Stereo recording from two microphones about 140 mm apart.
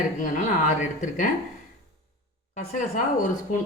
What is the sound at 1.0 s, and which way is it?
Speech, 65° left (ahead or behind).